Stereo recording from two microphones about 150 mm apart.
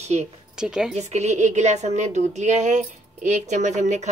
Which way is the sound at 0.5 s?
5° right (ahead or behind).